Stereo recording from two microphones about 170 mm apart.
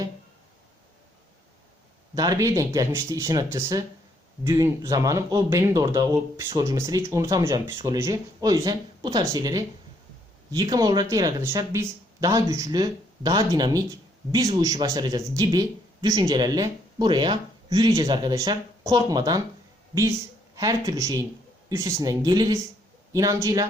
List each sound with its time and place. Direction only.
2.1 s a man's voice: 20° right (ahead or behind)